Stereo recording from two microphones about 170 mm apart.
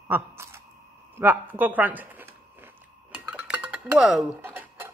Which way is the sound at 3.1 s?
5° right (ahead or behind).